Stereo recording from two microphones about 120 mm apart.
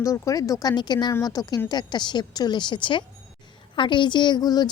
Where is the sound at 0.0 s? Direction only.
30° left (ahead or behind).